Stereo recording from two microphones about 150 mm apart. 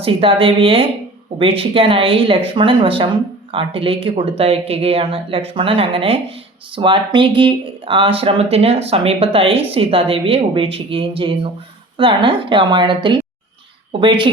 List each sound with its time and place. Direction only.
0.0 s speech: 40° right (ahead or behind)